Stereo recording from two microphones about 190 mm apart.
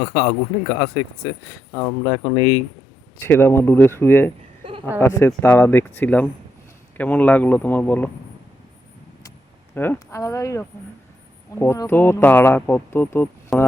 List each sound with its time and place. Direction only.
0.0 s speech: 15° left (ahead or behind)
1.7 s speech: 15° left (ahead or behind)
3.2 s speech: 10° left (ahead or behind)
4.6 s a sound: 25° right (ahead or behind)
4.9 s speech: 10° left (ahead or behind)
9.7 s speech: 10° left (ahead or behind)
13.5 s speech: centre (ahead or behind)